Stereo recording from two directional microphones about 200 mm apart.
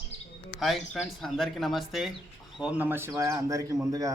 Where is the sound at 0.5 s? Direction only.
Centre (ahead or behind).